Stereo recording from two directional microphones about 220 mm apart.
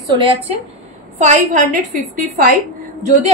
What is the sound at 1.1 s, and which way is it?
Speech, 35° right (ahead or behind).